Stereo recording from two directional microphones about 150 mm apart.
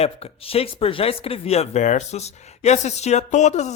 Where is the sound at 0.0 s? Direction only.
40° left (ahead or behind).